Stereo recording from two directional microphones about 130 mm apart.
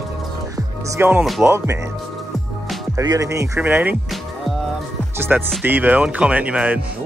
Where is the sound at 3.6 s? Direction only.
15° right (ahead or behind).